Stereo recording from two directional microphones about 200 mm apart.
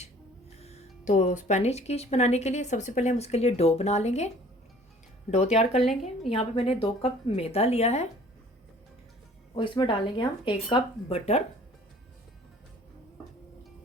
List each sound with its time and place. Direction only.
0.6 s speech: 35° left (ahead or behind)
5.3 s speech: 35° left (ahead or behind)
5.8 s a woman's voice: centre (ahead or behind)
6.3 s speech: 30° left (ahead or behind)
9.6 s speech: 25° left (ahead or behind)